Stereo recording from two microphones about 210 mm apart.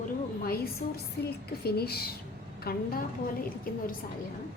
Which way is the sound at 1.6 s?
50° left (ahead or behind).